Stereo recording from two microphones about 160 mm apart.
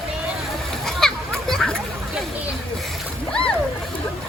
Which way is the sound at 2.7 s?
5° left (ahead or behind).